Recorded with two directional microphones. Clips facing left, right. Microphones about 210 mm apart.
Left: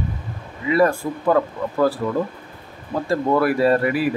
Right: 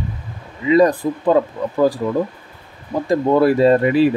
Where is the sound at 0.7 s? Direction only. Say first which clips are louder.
Right 4 dB; 20° right (ahead or behind).